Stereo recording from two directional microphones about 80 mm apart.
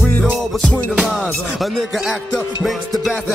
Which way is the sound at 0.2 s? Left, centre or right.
Centre.